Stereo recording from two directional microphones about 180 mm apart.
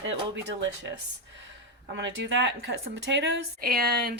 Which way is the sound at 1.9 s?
80° right.